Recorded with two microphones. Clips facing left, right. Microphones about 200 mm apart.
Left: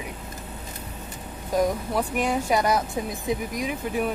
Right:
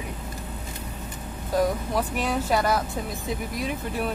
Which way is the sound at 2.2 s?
15° left (ahead or behind).